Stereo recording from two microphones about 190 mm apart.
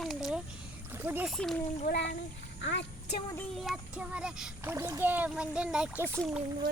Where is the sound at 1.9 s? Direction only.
65° left (ahead or behind).